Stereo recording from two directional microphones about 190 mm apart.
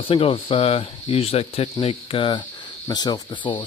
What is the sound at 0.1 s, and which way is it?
Speech, 30° left (ahead or behind).